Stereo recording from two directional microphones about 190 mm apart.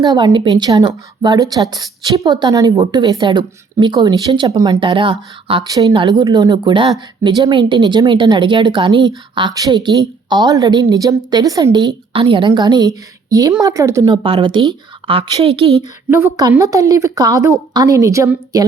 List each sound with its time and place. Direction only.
0.0 s a woman's voice: 20° right (ahead or behind)
16.0 s a woman's voice: 15° right (ahead or behind)